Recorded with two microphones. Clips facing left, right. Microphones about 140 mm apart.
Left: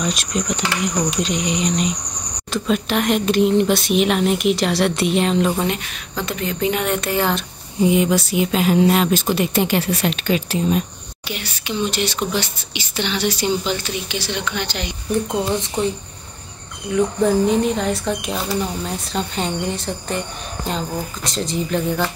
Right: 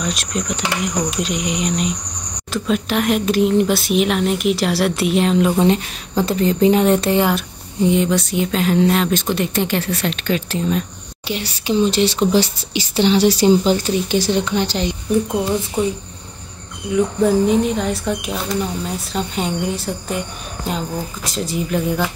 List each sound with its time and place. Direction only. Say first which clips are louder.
0.0 s speech: left 1 dB; centre (ahead or behind)
5.6 s speech: right 7 dB; 30° right (ahead or behind)
7.2 s speech: right 3 dB; 10° right (ahead or behind)
7.8 s speech: even; 5° left (ahead or behind)
11.2 s speech: right 6 dB; 30° right (ahead or behind)
15.3 s speech: right 2 dB; 5° right (ahead or behind)
16.9 s speech: right 1 dB; 5° right (ahead or behind)